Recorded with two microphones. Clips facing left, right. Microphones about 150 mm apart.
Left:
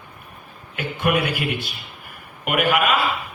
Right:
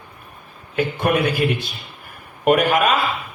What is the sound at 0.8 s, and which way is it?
Speech, 45° right (ahead or behind).